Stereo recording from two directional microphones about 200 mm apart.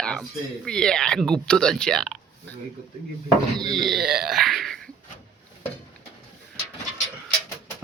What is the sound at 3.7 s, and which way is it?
Speech, centre (ahead or behind).